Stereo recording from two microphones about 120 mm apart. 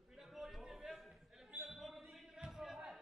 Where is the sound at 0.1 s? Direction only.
Centre (ahead or behind).